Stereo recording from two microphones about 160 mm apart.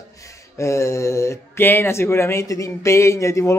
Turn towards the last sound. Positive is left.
turn(degrees=20)  # may be behind; listen again after turning